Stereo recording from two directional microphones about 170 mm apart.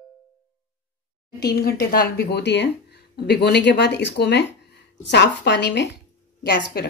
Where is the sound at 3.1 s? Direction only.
75° left (ahead or behind).